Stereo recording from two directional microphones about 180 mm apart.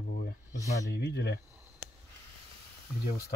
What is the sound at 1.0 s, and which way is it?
Speech, 70° left (ahead or behind).